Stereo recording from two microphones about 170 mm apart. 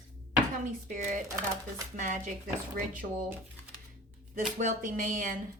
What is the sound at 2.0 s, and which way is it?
Speech, 50° right (ahead or behind).